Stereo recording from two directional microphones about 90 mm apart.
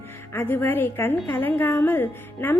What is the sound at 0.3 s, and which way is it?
A woman's voice, 25° left (ahead or behind).